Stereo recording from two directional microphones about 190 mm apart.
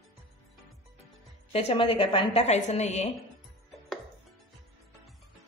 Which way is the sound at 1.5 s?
30° left (ahead or behind).